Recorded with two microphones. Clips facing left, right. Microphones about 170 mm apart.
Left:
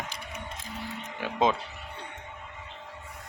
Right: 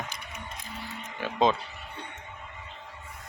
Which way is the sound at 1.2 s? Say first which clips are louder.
Right 1 dB; 15° left (ahead or behind).